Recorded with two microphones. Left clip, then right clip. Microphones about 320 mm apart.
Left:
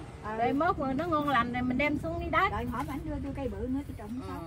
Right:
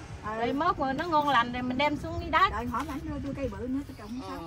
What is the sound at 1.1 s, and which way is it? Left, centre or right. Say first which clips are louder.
Speech: right 4 dB; right.